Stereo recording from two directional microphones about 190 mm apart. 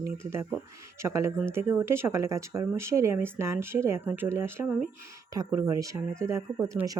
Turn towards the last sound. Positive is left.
turn(degrees=-15)  # may be behind; listen again after turning